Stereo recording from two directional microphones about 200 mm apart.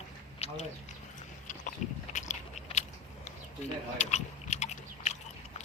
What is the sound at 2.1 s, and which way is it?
Biting, 35° left (ahead or behind).